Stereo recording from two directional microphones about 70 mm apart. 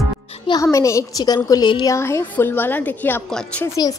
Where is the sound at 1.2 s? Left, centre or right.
Left.